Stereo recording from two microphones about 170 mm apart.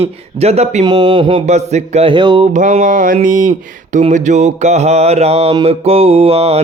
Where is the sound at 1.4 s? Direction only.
40° right (ahead or behind).